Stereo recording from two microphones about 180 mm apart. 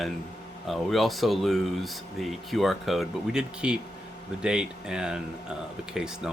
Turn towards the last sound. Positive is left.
turn(degrees=-5)  # may be behind; listen again after turning